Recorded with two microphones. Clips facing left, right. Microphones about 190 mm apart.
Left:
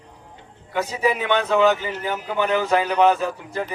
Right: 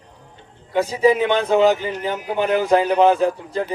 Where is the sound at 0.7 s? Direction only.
35° right (ahead or behind).